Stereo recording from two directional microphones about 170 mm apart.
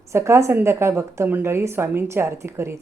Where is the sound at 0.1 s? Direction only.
15° right (ahead or behind).